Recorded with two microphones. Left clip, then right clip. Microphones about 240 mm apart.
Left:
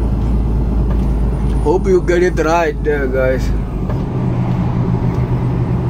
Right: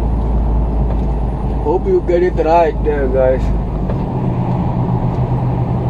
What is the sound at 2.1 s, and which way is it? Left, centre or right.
Speech, left.